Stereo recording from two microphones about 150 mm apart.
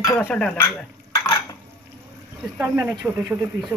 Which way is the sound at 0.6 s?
20° left (ahead or behind).